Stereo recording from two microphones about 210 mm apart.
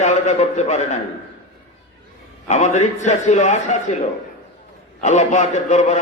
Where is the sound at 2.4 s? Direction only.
35° left (ahead or behind).